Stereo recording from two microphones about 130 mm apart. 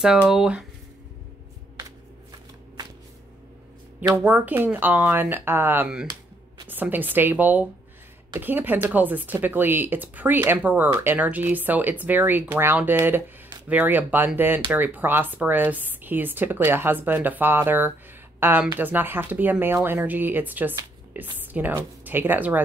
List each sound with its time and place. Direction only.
0.3 s speech: 5° right (ahead or behind)
4.1 s a woman's voice: 15° right (ahead or behind)